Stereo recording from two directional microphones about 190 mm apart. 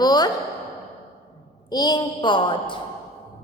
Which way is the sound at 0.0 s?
20° left (ahead or behind).